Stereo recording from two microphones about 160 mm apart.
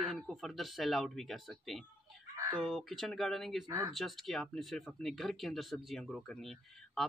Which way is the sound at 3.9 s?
Centre (ahead or behind).